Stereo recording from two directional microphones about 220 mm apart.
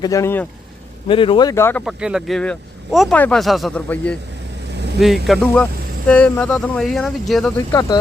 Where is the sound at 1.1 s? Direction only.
25° left (ahead or behind).